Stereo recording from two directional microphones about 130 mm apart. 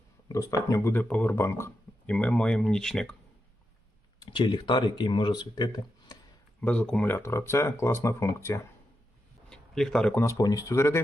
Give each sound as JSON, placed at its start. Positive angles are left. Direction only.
{"t": 0.3, "sound": "speech", "side_deg": 25}
{"t": 2.0, "sound": "speech", "side_deg": 10}
{"t": 4.2, "sound": "speech", "side_deg": 35}
{"t": 6.6, "sound": "speech", "side_deg": 10}
{"t": 9.5, "sound": "a sound", "side_deg": 5}
{"t": 10.2, "sound": "speech", "side_deg": 25}